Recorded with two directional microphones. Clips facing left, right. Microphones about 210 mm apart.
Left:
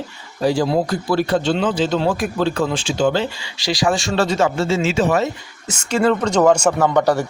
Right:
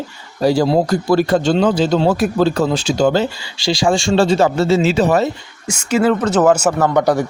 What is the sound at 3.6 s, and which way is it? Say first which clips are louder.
Speech: right 3 dB; 25° right (ahead or behind).